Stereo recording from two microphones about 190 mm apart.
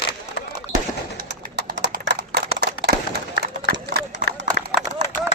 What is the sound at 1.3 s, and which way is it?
Bird, 55° right (ahead or behind).